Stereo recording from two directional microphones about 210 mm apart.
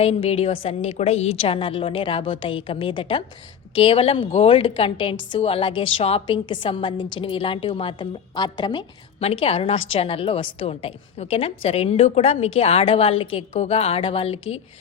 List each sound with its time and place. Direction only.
0.0 s a woman's voice: 30° left (ahead or behind)